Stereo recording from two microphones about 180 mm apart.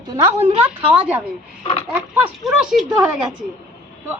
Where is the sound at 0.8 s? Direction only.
10° right (ahead or behind).